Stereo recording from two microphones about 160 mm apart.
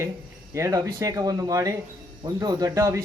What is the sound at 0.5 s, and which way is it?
Speech, 20° right (ahead or behind).